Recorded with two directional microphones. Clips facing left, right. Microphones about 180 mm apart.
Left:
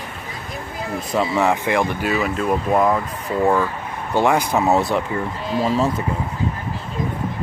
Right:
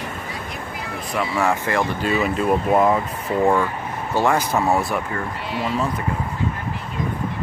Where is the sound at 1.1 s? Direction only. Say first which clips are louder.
Left 3 dB; 25° left (ahead or behind).